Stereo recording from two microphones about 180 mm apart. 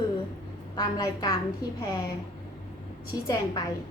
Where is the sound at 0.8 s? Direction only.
20° left (ahead or behind).